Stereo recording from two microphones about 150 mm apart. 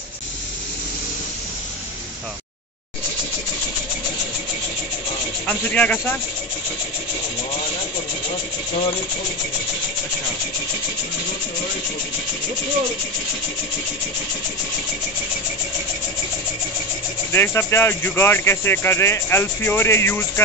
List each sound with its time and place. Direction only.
5.5 s speech: 10° left (ahead or behind)
17.3 s speech: 15° left (ahead or behind)